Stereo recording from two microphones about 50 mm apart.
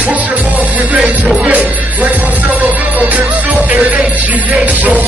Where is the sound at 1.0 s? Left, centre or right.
Right.